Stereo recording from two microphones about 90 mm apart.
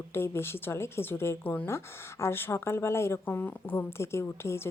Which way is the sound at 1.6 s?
30° left (ahead or behind).